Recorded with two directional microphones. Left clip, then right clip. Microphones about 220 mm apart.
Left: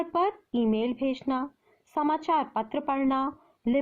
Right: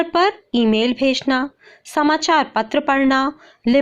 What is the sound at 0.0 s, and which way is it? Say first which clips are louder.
A woman's voice: right 10 dB; 10° right (ahead or behind).